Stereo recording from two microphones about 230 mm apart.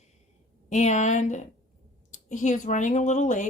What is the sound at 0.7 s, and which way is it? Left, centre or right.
Speech, left.